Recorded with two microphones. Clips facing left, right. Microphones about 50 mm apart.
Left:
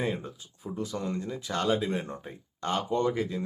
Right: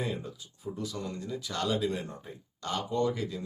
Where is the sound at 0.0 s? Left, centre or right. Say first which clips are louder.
Left 3 dB; left.